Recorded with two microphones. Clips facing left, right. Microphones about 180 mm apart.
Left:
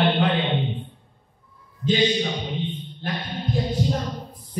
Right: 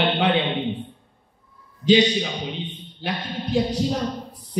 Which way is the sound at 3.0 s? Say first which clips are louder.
Right 1 dB; 80° right.